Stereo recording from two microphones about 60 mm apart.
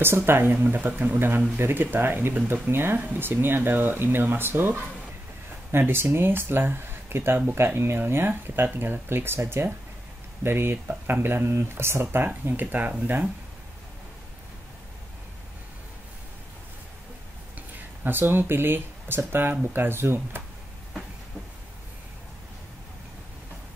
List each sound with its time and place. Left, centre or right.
0.0 s speech: right
17.6 s speech: right